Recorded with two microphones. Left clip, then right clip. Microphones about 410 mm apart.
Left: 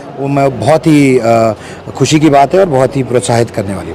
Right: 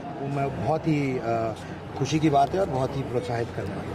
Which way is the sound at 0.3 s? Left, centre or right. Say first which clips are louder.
Left 18 dB; left.